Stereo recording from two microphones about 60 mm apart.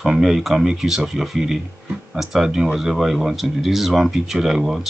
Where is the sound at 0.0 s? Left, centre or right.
Centre.